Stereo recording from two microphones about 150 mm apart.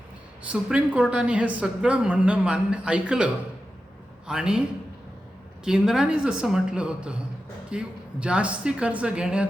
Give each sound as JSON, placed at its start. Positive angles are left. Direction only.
{"t": 0.4, "sound": "a man's voice", "side_deg": -5}
{"t": 4.3, "sound": "speech", "side_deg": -5}
{"t": 5.6, "sound": "a man's voice", "side_deg": -5}